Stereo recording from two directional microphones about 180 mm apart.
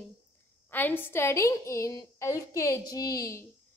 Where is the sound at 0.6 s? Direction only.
10° left (ahead or behind).